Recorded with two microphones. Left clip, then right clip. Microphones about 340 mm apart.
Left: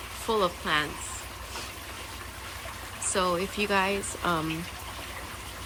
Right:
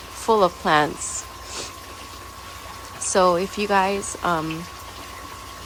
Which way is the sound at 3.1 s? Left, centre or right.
Centre.